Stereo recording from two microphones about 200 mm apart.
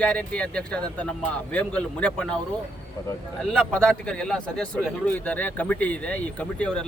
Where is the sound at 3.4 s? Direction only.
5° left (ahead or behind).